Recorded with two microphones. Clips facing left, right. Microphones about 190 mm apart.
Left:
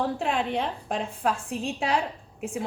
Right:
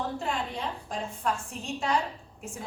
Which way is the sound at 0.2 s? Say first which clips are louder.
Left 6 dB; 60° left (ahead or behind).